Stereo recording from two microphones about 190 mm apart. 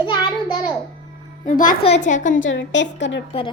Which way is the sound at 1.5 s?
45° left (ahead or behind).